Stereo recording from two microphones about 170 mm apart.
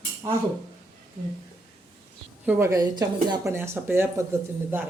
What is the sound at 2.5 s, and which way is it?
A woman's voice, 15° right (ahead or behind).